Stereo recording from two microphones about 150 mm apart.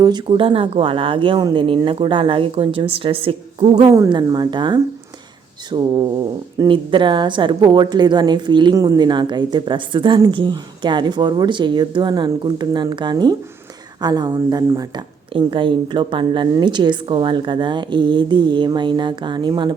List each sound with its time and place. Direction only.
0.0 s speech: 30° right (ahead or behind)